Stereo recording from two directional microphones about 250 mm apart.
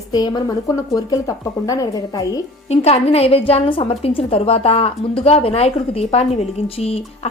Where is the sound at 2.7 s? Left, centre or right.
Left.